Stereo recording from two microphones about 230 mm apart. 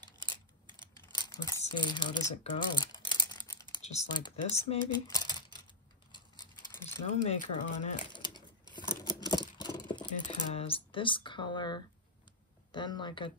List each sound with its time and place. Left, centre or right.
0.0 s scissors: centre
1.1 s a sound: centre
3.7 s speech: left
7.2 s speech: left
8.1 s a sound: centre
8.7 s computer keyboard: centre
10.5 s speech: left